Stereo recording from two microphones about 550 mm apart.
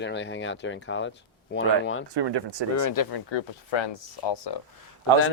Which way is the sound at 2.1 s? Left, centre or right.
Right.